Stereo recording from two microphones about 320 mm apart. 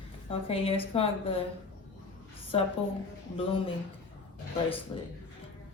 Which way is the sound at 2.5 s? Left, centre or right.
Centre.